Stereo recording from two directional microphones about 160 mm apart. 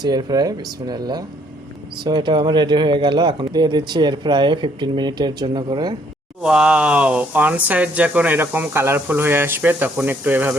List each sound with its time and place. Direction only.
0.0 s speech: 25° right (ahead or behind)
6.4 s speech: 5° right (ahead or behind)